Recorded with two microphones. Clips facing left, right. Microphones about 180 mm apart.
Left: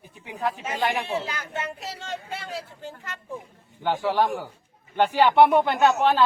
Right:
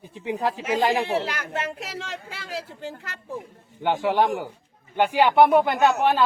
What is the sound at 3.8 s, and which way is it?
A woman's voice, 20° right (ahead or behind).